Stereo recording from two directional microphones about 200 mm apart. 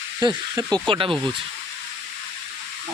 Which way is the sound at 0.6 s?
5° left (ahead or behind).